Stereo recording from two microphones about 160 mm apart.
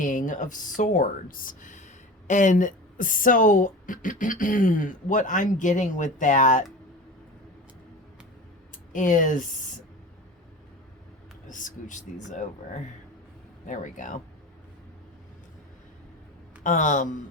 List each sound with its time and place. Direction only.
0.0 s speech: 55° left (ahead or behind)
8.9 s speech: 55° left (ahead or behind)
11.4 s speech: 50° left (ahead or behind)
13.7 s speech: 50° left (ahead or behind)
16.6 s speech: 50° left (ahead or behind)